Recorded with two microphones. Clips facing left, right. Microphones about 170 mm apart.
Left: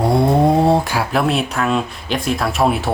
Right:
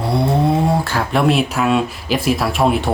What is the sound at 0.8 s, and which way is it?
Speech, 10° left (ahead or behind).